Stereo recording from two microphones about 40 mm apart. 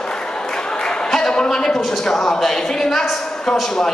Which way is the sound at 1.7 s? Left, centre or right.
Centre.